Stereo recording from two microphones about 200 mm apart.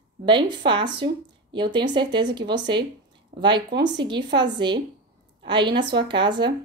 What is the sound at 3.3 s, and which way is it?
Speech, 35° right (ahead or behind).